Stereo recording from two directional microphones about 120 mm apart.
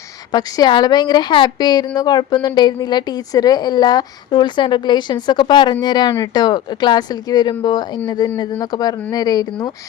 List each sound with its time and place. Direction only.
0.3 s a woman's voice: 35° left (ahead or behind)